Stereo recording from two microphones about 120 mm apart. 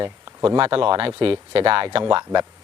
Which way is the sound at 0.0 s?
40° right (ahead or behind).